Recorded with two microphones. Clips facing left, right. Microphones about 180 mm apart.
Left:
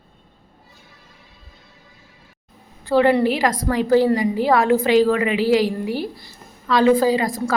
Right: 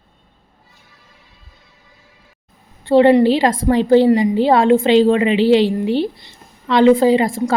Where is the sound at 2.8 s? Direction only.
25° right (ahead or behind).